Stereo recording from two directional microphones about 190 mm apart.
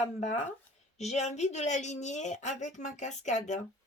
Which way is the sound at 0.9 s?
35° left (ahead or behind).